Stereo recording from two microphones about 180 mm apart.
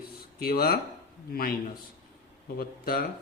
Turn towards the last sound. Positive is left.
turn(degrees=55)  # may be behind; listen again after turning